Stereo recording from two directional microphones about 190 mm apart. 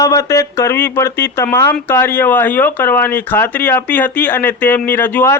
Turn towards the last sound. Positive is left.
turn(degrees=10)  # may be behind; listen again after turning